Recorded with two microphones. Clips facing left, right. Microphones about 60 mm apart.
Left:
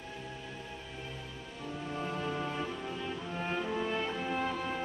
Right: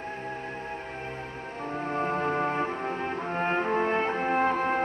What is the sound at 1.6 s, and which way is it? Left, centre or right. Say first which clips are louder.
Music: right 8 dB; right.